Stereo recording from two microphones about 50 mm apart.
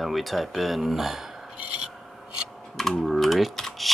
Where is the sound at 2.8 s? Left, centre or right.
Centre.